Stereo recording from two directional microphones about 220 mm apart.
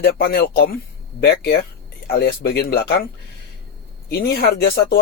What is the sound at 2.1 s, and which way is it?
Speech, 45° left (ahead or behind).